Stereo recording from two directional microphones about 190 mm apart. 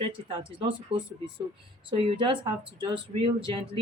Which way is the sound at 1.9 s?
30° right (ahead or behind).